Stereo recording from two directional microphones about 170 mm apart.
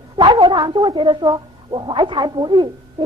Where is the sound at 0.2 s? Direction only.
25° right (ahead or behind).